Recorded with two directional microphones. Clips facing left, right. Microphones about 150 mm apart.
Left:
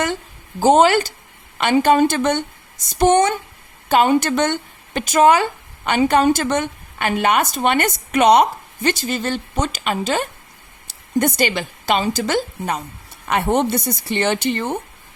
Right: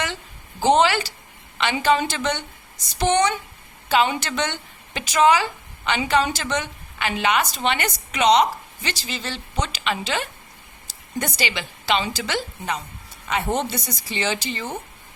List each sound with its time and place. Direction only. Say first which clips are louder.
0.6 s a woman's voice: left 5 dB; 45° left (ahead or behind)
13.2 s speech: left 6 dB; 60° left (ahead or behind)